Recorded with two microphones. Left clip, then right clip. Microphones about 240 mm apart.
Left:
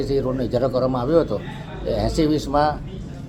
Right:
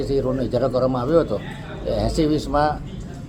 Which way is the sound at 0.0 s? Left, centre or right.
Centre.